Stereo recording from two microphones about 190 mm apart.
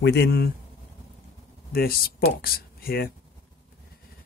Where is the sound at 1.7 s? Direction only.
50° left (ahead or behind).